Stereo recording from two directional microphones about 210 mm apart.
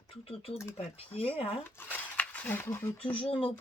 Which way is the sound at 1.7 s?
10° left (ahead or behind).